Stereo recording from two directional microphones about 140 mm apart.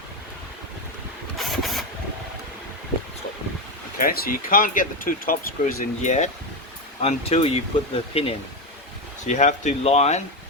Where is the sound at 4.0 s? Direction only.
90° left.